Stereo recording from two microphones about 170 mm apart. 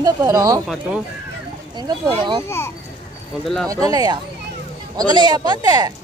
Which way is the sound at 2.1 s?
25° right (ahead or behind).